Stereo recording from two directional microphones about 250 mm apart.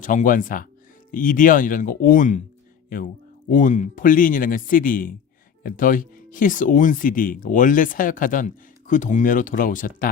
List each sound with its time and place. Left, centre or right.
0.0 s speech: left
3.5 s speech: left